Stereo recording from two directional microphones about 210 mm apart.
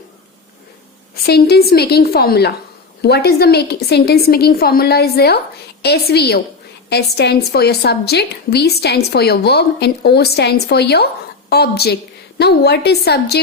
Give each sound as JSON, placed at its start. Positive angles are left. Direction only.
{"t": 1.2, "sound": "a woman's voice", "side_deg": 50}